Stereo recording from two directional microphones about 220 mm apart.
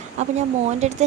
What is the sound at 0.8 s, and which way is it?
Speech, 30° right (ahead or behind).